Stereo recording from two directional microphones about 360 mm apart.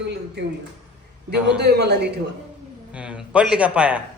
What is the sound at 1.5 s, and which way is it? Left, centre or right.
Speech, right.